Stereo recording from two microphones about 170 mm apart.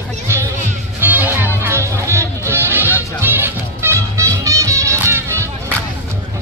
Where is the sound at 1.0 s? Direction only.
10° right (ahead or behind).